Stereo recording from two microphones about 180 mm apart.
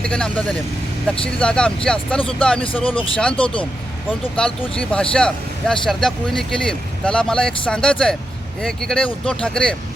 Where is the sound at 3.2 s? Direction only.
5° left (ahead or behind).